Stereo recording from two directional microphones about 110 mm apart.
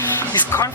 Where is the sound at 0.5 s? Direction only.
25° left (ahead or behind).